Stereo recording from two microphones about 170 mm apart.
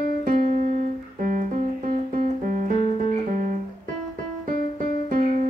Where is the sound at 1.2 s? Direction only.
50° right (ahead or behind).